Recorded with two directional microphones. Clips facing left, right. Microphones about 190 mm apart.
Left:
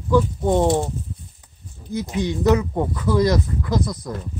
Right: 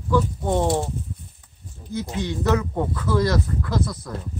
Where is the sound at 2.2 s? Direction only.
15° left (ahead or behind).